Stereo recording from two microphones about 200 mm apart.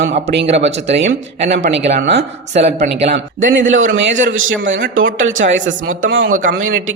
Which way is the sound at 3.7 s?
70° right (ahead or behind).